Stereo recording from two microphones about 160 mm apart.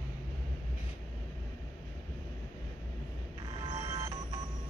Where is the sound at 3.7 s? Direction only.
25° right (ahead or behind).